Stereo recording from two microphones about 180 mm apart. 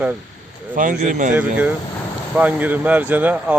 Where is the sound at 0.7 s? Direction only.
50° right (ahead or behind).